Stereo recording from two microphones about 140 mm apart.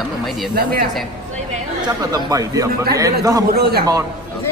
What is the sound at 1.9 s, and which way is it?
A woman's voice, 25° right (ahead or behind).